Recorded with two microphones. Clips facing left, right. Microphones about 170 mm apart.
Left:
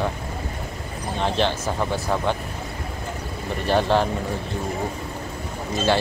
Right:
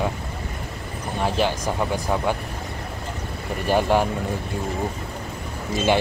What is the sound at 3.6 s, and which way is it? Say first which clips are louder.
Speech: even; 10° right (ahead or behind).